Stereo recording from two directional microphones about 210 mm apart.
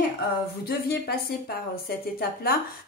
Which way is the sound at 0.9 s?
50° left (ahead or behind).